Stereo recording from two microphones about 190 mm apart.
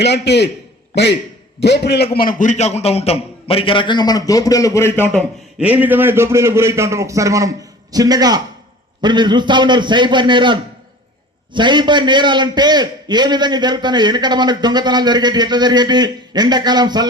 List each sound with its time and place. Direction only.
0.0 s a man's voice: 65° left (ahead or behind)
2.1 s a man's voice: 50° left (ahead or behind); by 5.2 s 10° left (ahead or behind)
5.5 s a man's voice: 10° right (ahead or behind)